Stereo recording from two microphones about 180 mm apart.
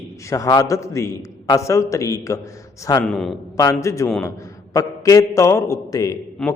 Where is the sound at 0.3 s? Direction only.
20° left (ahead or behind).